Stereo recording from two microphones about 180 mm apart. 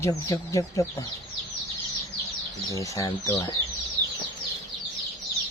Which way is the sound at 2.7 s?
15° left (ahead or behind).